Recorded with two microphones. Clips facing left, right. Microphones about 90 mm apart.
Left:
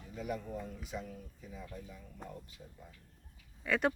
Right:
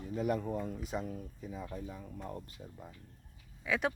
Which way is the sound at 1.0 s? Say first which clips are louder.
Right 6 dB; 35° right (ahead or behind).